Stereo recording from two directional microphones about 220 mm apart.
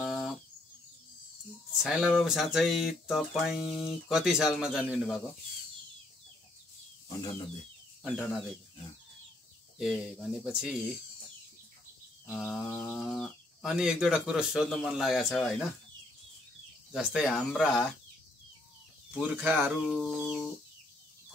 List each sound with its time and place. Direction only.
0.0 s bird: centre (ahead or behind)
1.7 s speech: 5° right (ahead or behind)
7.1 s speech: 15° left (ahead or behind)
9.8 s speech: centre (ahead or behind)
12.3 s speech: centre (ahead or behind)
16.9 s speech: centre (ahead or behind)
19.1 s speech: 5° right (ahead or behind)